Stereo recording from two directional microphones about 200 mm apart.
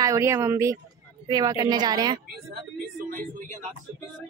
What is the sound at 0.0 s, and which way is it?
A woman's voice, 15° right (ahead or behind).